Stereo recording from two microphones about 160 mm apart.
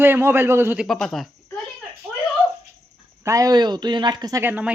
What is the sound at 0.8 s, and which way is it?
Speech, 5° left (ahead or behind).